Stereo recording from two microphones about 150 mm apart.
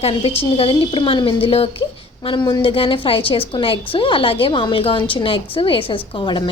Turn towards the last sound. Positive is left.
turn(degrees=35)  # may be behind; listen again after turning